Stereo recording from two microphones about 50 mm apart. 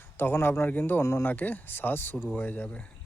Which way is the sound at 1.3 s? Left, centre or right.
Left.